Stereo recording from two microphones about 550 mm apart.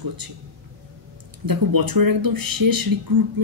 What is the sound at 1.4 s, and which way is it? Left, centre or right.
Speech, right.